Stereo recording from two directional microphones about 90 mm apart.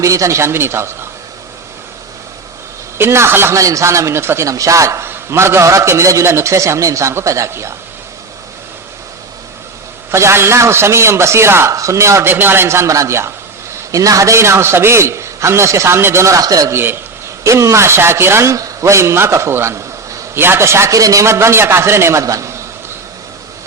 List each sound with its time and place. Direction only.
0.0 s speech: 35° right (ahead or behind)
3.0 s speech: 30° right (ahead or behind)
10.1 s speech: 30° right (ahead or behind)
16.7 s speech: 25° right (ahead or behind)